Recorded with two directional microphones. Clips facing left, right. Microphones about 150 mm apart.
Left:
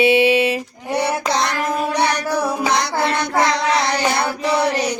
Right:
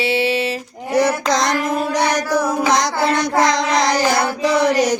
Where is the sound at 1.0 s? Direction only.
90° right.